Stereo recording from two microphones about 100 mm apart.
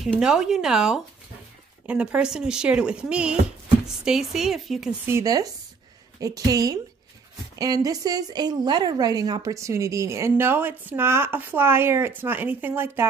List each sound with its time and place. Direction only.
0.2 s a woman's voice: 5° right (ahead or behind)
5.2 s a woman's voice: 40° right (ahead or behind); by 13.0 s 20° right (ahead or behind)